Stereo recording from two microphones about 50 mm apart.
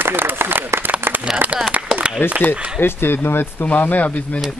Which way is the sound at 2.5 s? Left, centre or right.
Left.